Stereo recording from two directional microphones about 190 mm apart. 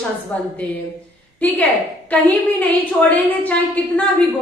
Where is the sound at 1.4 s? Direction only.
10° left (ahead or behind).